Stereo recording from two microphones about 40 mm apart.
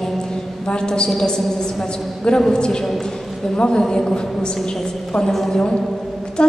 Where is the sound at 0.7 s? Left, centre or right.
Left.